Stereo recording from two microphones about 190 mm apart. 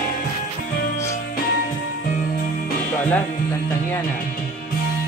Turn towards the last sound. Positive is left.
turn(degrees=10)  # may be behind; listen again after turning